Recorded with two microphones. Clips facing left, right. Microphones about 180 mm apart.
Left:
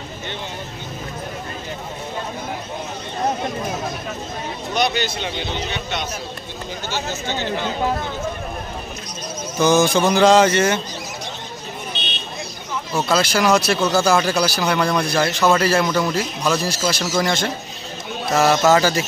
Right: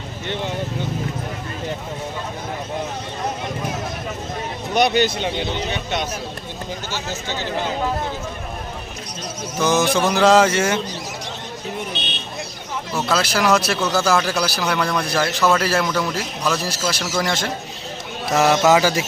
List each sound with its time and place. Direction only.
4.7 s speech: 55° right (ahead or behind)
9.6 s speech: centre (ahead or behind)
12.9 s speech: centre (ahead or behind)
18.3 s speech: 15° right (ahead or behind)